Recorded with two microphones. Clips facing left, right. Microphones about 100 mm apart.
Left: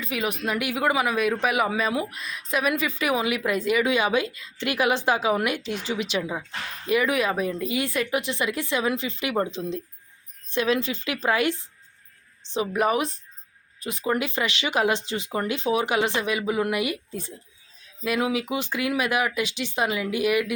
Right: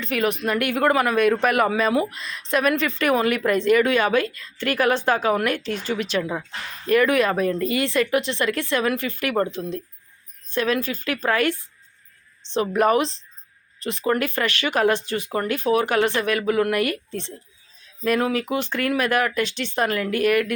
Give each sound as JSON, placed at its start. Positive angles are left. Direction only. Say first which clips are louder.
{"t": 0.0, "sound": "a woman's voice", "louder": "right 5 dB", "side_deg": 5}
{"t": 12.7, "sound": "speech", "louder": "right 5 dB", "side_deg": 5}